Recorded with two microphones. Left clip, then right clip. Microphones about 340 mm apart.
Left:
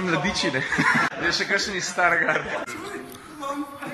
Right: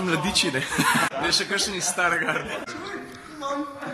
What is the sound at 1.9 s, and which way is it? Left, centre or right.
Speech, centre.